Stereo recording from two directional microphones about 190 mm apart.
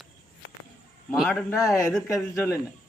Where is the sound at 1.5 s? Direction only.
15° left (ahead or behind).